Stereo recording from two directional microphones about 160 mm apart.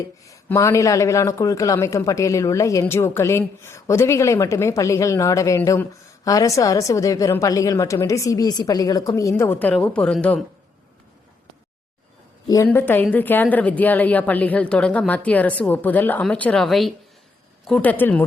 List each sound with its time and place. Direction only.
0.3 s a woman's voice: 15° left (ahead or behind)
12.6 s a woman's voice: 15° left (ahead or behind)